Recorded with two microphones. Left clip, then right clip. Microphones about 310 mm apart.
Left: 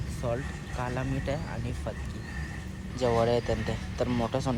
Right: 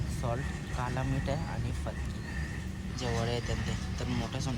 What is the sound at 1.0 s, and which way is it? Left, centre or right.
Speech, centre.